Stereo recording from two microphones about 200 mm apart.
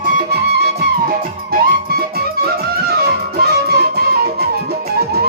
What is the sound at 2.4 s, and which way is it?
Music, 50° right (ahead or behind).